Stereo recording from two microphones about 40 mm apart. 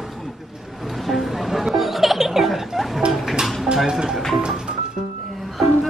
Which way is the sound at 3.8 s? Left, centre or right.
Centre.